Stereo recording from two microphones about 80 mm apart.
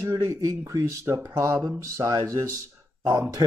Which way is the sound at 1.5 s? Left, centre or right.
Right.